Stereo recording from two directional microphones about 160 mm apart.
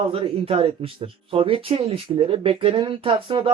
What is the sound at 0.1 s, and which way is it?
Speech, 35° right (ahead or behind).